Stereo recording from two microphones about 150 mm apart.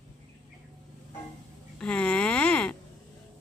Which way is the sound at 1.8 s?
5° left (ahead or behind).